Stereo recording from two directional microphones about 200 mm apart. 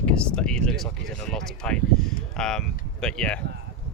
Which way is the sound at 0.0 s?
5° left (ahead or behind).